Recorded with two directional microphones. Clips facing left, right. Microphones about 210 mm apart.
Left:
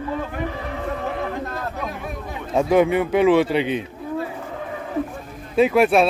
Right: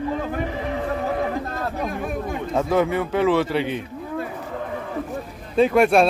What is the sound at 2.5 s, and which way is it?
A man's voice, 15° left (ahead or behind).